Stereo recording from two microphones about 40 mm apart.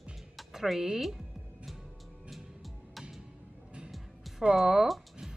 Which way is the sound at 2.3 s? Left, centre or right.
Centre.